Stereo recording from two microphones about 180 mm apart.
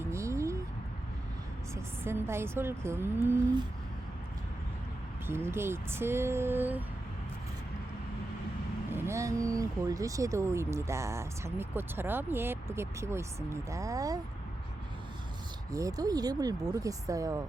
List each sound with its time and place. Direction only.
0.0 s a sound: 15° right (ahead or behind)
1.7 s speech: 15° right (ahead or behind)
5.2 s speech: 15° right (ahead or behind)
8.9 s speech: 15° right (ahead or behind)
15.7 s speech: 20° right (ahead or behind)